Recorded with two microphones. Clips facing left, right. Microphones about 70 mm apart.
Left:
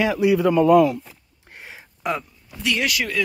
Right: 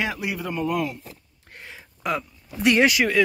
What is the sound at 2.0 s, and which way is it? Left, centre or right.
Speech, centre.